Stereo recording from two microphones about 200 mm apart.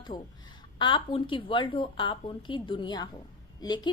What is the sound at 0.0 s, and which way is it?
A woman's voice, 20° left (ahead or behind).